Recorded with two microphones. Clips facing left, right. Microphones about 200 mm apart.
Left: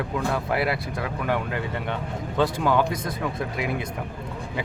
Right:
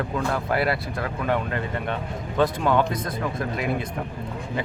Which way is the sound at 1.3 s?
15° left (ahead or behind).